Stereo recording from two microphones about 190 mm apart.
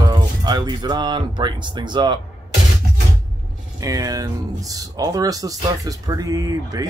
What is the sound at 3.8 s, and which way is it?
Speech, 20° right (ahead or behind).